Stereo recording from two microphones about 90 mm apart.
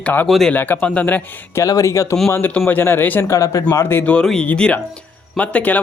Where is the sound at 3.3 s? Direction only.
35° left (ahead or behind).